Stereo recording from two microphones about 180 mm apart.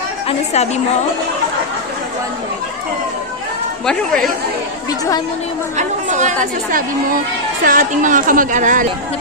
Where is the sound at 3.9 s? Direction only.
5° left (ahead or behind).